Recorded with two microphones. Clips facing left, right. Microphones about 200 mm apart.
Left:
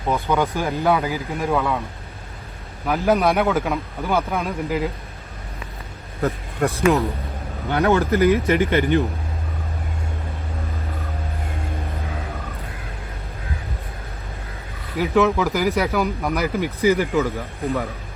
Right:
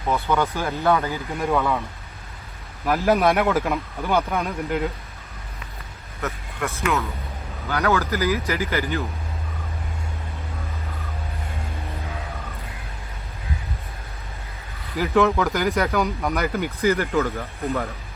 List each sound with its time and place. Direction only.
0.1 s speech: 15° left (ahead or behind)
1.3 s speech: centre (ahead or behind)
2.8 s speech: centre (ahead or behind)
6.2 s speech: 30° left (ahead or behind)
14.9 s speech: centre (ahead or behind)